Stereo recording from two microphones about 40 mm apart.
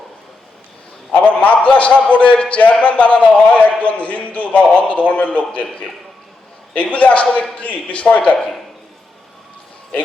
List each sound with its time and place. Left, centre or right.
1.1 s a man's voice: left
6.7 s a man's voice: left